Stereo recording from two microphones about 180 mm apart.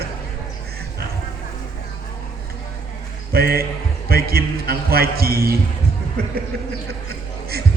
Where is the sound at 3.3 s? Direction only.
55° right (ahead or behind).